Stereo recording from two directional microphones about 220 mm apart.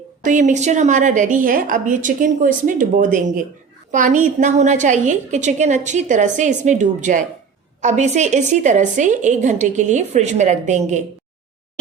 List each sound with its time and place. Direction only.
0.2 s a woman's voice: 35° right (ahead or behind)